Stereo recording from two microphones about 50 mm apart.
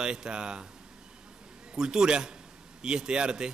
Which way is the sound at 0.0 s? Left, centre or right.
Centre.